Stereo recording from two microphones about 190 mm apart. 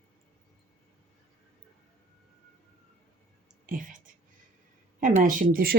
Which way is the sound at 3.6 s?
45° right (ahead or behind).